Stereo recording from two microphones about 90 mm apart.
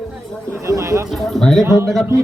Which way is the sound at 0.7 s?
35° right (ahead or behind).